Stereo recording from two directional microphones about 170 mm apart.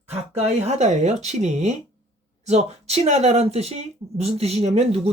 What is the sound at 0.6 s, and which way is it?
Speech, 40° right (ahead or behind).